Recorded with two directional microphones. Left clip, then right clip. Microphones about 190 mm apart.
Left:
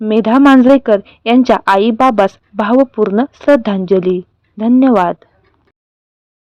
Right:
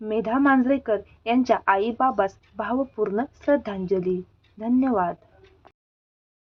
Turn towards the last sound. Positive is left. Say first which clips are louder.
# left 12 dB
turn(degrees=50)  # may be behind; listen again after turning